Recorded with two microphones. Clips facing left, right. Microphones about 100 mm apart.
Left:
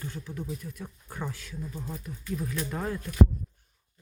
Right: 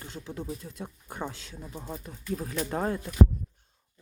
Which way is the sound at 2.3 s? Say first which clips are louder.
Right 2 dB; 40° right (ahead or behind).